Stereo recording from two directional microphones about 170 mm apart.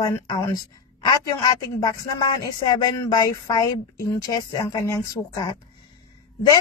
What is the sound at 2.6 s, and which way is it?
A woman's voice, 25° left (ahead or behind).